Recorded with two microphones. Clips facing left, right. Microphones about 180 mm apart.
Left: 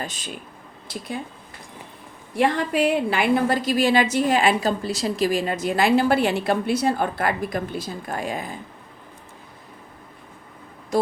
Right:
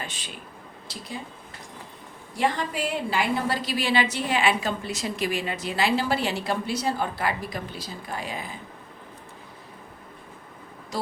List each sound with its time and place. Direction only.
0.0 s speech: 40° left (ahead or behind)
0.9 s speech: 55° left (ahead or behind)
2.3 s a woman's voice: 65° left (ahead or behind); by 8.5 s 50° left (ahead or behind)